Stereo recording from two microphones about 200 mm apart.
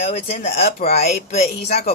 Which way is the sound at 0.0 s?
30° left (ahead or behind).